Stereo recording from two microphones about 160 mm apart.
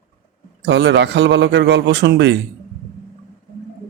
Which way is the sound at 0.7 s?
90° right.